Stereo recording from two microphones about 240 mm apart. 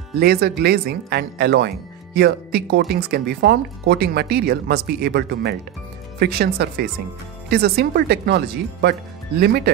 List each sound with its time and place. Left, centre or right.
0.2 s speech: right